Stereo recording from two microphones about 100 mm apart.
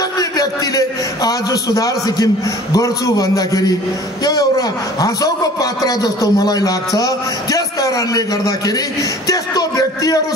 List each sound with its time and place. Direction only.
0.2 s a man's voice: 40° left (ahead or behind)